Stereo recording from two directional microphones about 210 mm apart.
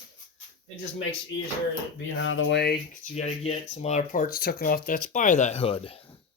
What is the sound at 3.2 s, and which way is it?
Speech, 30° left (ahead or behind).